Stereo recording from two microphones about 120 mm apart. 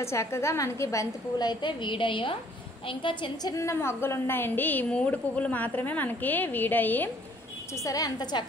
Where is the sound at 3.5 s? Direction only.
20° left (ahead or behind).